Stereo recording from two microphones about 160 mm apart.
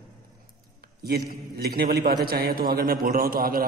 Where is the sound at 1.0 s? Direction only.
80° right.